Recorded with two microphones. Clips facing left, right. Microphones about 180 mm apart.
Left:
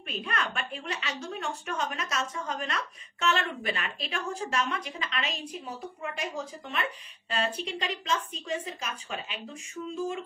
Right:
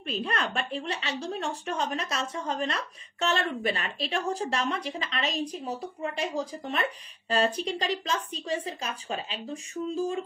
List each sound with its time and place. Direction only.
0.0 s a woman's voice: 35° right (ahead or behind)